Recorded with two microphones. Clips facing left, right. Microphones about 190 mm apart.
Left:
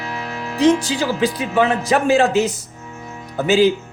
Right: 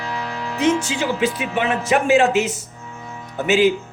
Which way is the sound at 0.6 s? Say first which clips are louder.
Left 4 dB; 35° left (ahead or behind).